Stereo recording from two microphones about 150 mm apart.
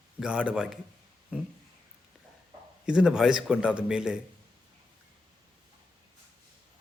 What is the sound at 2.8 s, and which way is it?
Speech, 5° right (ahead or behind).